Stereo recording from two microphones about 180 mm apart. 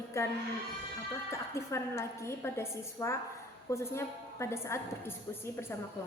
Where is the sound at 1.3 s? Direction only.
15° left (ahead or behind).